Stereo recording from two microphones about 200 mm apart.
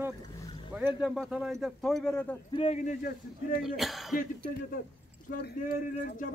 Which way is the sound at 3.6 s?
Centre (ahead or behind).